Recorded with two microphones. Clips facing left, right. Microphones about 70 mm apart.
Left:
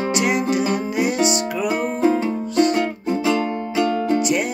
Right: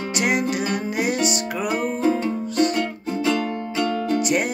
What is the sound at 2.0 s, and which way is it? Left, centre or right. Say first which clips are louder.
Music: left 4 dB; left.